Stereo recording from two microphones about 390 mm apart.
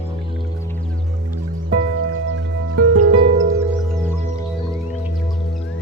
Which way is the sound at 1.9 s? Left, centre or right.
Right.